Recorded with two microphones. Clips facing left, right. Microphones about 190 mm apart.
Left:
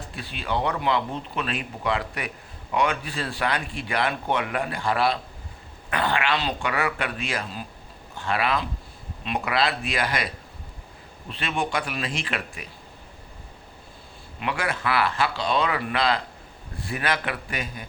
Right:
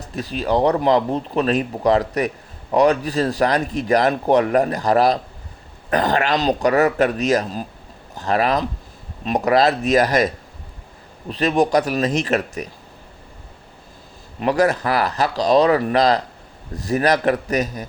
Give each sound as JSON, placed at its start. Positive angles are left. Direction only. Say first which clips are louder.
{"t": 0.0, "sound": "speech", "louder": "right 10 dB", "side_deg": -40}
{"t": 14.3, "sound": "speech", "louder": "right 11 dB", "side_deg": -40}